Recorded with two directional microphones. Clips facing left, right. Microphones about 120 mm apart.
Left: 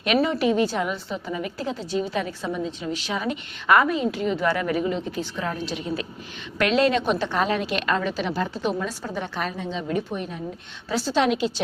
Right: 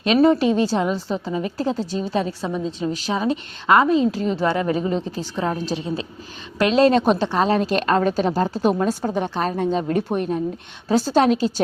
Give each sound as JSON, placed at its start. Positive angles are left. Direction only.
{"t": 0.0, "sound": "a woman's voice", "side_deg": -35}